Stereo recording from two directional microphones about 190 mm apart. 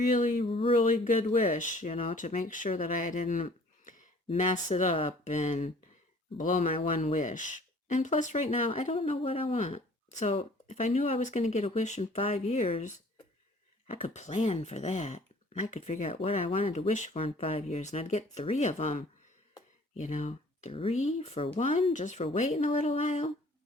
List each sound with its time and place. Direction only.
0.0 s speech: 45° left (ahead or behind)
0.4 s a sound: 30° left (ahead or behind)
1.0 s speech: 40° left (ahead or behind)
6.7 s speech: 30° left (ahead or behind)